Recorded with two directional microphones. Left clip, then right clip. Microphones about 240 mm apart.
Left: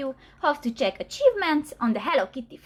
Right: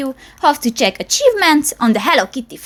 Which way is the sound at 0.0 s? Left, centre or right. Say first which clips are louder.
Right 11 dB; right.